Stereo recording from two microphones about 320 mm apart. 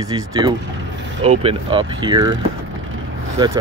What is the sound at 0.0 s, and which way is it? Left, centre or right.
Speech, centre.